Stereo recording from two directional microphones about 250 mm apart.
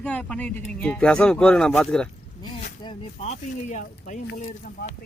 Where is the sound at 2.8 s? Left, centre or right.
Left.